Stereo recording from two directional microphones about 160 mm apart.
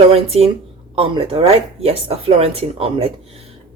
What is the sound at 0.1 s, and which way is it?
Speech, 40° right (ahead or behind).